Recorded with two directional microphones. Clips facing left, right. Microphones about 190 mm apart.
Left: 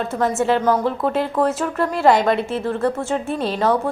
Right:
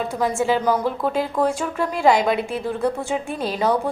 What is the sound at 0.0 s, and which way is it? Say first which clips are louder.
Speech: left 2 dB; centre (ahead or behind).